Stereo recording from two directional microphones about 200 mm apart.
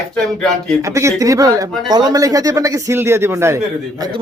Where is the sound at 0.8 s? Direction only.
15° right (ahead or behind).